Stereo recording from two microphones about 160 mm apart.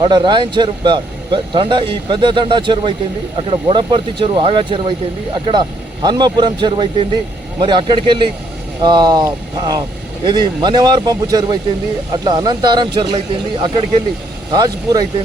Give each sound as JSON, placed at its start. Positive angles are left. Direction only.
{"t": 0.0, "sound": "speech", "side_deg": -30}